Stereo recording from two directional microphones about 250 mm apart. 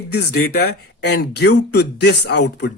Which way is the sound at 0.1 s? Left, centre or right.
Left.